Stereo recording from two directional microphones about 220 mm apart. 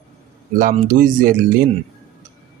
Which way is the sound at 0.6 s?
35° right (ahead or behind).